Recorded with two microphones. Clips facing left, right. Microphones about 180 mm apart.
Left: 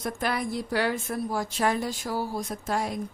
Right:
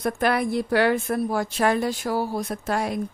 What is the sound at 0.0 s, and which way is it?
A woman's voice, 65° right (ahead or behind).